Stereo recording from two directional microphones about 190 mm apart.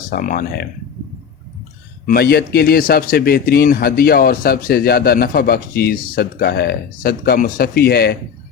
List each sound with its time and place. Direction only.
0.1 s a man's voice: 45° left (ahead or behind)
2.0 s a man's voice: 55° left (ahead or behind)